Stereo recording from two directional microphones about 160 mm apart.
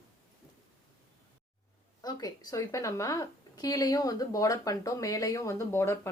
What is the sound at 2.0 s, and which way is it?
Speech, 25° left (ahead or behind).